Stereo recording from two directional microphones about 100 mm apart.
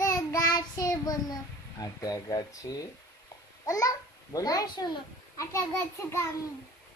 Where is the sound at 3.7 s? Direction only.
35° left (ahead or behind).